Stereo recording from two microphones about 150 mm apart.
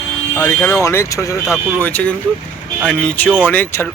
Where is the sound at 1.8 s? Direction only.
10° left (ahead or behind).